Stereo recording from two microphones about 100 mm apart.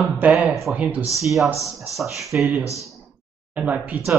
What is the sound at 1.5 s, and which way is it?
Speech, 30° left (ahead or behind).